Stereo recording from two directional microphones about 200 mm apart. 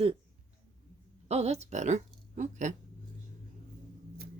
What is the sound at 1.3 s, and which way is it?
Speech, 30° right (ahead or behind).